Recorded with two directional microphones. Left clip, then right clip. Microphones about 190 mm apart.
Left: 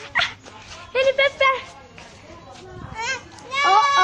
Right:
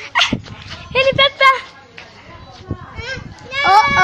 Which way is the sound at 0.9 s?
5° right (ahead or behind).